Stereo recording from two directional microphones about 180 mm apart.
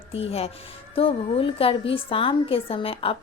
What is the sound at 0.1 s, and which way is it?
Speech, 35° left (ahead or behind).